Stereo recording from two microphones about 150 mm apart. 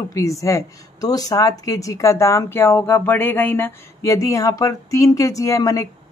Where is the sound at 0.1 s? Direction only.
20° left (ahead or behind).